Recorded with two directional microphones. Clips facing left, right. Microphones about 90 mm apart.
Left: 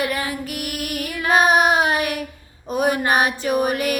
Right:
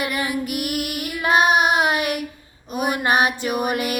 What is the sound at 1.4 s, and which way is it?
Child singing, 35° left (ahead or behind).